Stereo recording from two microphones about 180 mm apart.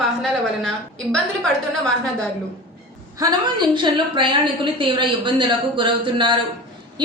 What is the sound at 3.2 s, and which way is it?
A woman's voice, 25° right (ahead or behind).